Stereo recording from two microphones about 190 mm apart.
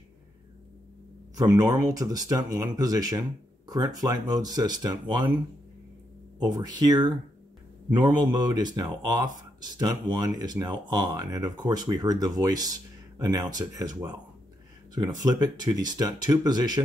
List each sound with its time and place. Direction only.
1.3 s speech: 20° right (ahead or behind)
6.4 s speech: 20° right (ahead or behind)